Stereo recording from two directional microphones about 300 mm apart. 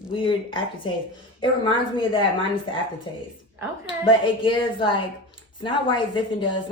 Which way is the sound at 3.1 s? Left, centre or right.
Centre.